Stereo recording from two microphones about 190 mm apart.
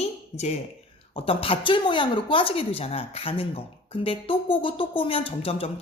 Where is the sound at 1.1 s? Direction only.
30° left (ahead or behind).